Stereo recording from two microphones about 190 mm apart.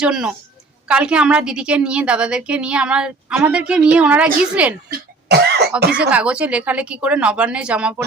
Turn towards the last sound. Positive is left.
turn(degrees=-5)  # may be behind; listen again after turning